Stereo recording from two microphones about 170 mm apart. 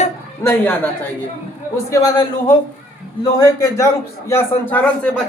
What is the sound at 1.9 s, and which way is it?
A man's voice, 20° left (ahead or behind).